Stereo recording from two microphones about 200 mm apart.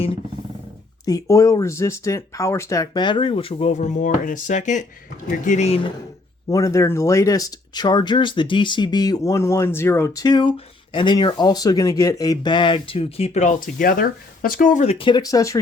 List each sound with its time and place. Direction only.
1.0 s speech: 15° left (ahead or behind)
6.5 s speech: 15° left (ahead or behind)